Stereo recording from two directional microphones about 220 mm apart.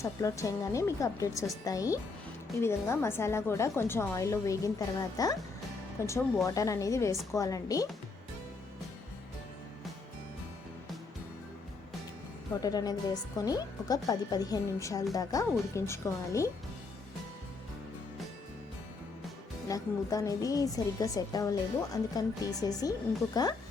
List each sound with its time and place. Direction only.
0.0 s a woman's voice: 15° left (ahead or behind)
12.5 s a woman's voice: 15° left (ahead or behind)
19.6 s a woman's voice: 15° left (ahead or behind)